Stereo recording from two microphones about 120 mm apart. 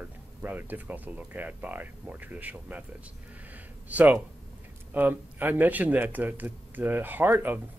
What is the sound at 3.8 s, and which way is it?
Speech, 15° right (ahead or behind).